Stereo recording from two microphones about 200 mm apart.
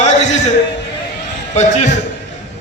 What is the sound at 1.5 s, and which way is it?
Speech, 35° left (ahead or behind).